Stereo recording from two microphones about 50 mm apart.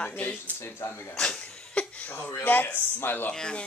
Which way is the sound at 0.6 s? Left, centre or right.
Left.